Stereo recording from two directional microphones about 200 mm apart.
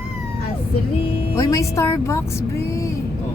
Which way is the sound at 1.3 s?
15° left (ahead or behind).